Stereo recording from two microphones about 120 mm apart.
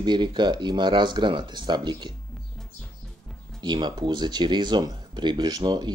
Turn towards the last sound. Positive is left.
turn(degrees=-35)  # may be behind; listen again after turning